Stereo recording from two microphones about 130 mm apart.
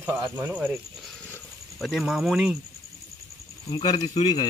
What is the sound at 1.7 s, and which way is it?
Speech, centre (ahead or behind).